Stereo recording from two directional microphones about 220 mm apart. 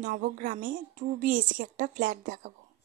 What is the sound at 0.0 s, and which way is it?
Speech, 40° right (ahead or behind).